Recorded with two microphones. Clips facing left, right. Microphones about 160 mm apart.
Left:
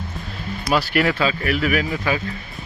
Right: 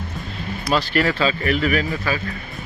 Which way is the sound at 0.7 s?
10° left (ahead or behind).